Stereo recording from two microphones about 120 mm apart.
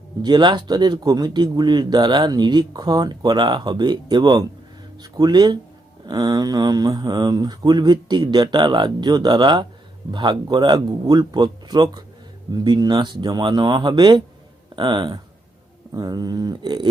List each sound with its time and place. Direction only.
0.2 s speech: 40° right (ahead or behind)